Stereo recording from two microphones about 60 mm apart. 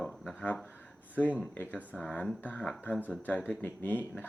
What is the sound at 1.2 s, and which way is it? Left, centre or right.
Speech, left.